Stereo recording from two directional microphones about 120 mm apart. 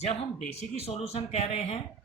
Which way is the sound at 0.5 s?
60° left (ahead or behind).